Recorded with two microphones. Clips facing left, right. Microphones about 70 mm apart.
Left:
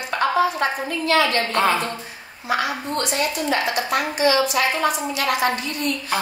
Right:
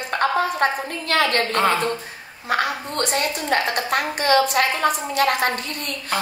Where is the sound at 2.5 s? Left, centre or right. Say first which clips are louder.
Even; right.